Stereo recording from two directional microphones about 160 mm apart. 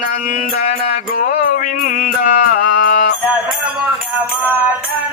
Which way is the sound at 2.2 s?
60° left (ahead or behind).